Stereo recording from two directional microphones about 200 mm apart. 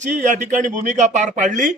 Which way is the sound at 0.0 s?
40° right (ahead or behind).